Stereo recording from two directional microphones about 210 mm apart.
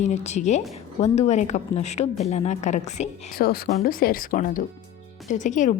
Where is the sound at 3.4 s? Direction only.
45° left (ahead or behind).